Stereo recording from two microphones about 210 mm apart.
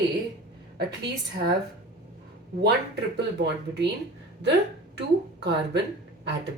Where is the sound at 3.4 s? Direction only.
55° right (ahead or behind).